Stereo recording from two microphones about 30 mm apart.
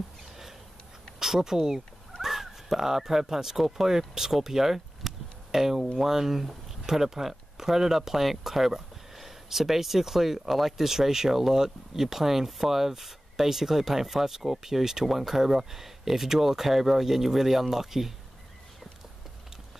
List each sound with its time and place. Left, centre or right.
1.2 s speech: centre